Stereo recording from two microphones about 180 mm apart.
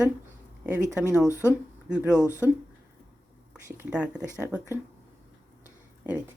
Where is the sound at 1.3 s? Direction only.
15° left (ahead or behind).